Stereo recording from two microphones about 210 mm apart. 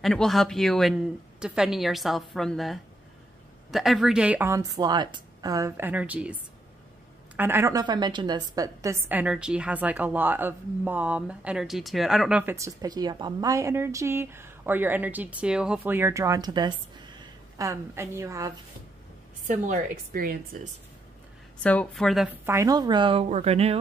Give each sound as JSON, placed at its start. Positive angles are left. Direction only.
{"t": 0.0, "sound": "a woman's voice", "side_deg": 0}
{"t": 19.4, "sound": "a woman's voice", "side_deg": -35}
{"t": 21.6, "sound": "speech", "side_deg": 5}
{"t": 22.5, "sound": "speech", "side_deg": -15}